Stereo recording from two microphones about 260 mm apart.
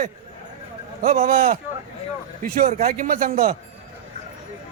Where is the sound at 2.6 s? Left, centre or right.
Right.